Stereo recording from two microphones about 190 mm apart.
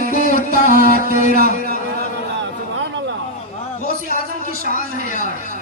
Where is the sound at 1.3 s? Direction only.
50° right (ahead or behind).